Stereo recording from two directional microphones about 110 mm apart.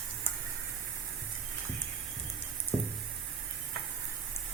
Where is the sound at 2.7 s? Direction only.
5° left (ahead or behind).